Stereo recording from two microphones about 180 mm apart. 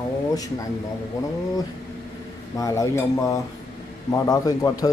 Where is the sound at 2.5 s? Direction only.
15° left (ahead or behind).